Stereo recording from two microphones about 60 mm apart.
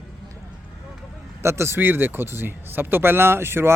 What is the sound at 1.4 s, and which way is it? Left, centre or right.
Speech, right.